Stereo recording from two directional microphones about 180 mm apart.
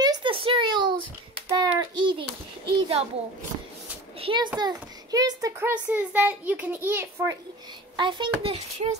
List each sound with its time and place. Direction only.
0.0 s a sound: 25° right (ahead or behind)
4.2 s a child's voice: 30° right (ahead or behind); by 7.3 s 10° right (ahead or behind)
8.0 s a child's voice: 25° right (ahead or behind)